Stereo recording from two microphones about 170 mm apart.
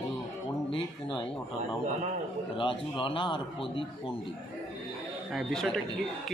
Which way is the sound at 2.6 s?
30° left (ahead or behind).